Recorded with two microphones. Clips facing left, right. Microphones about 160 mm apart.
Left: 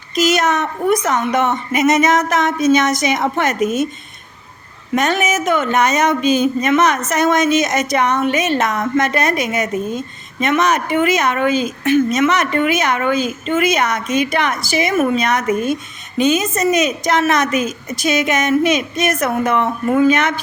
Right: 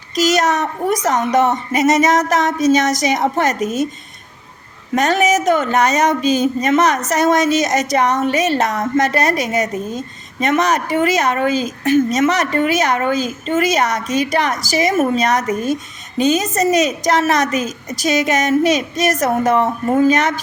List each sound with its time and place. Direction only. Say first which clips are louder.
0.2 s speech: even; 40° right (ahead or behind)
4.9 s speech: right 2 dB; 35° right (ahead or behind)